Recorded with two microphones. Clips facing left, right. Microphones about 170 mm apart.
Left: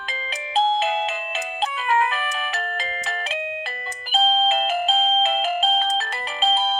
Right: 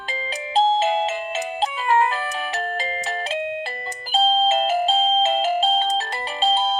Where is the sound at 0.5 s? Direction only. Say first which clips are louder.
Right 2 dB; 35° right (ahead or behind).